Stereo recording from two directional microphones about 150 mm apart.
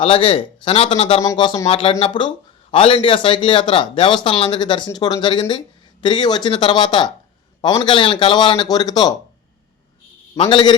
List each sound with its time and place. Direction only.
0.0 s speech: 35° left (ahead or behind)
1.2 s speech: 25° left (ahead or behind)
1.6 s speech: 40° left (ahead or behind)
7.9 s speech: 35° left (ahead or behind)
10.3 s speech: 40° left (ahead or behind)